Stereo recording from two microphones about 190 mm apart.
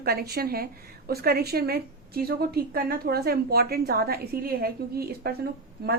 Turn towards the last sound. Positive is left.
turn(degrees=-55)  # may be behind; listen again after turning